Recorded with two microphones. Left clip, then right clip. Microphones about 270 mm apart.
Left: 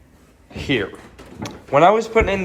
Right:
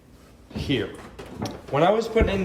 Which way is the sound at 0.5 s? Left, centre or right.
Centre.